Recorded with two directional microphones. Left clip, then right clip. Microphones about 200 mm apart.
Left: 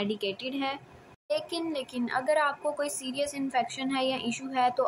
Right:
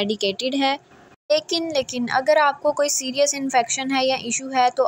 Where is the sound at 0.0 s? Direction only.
30° right (ahead or behind).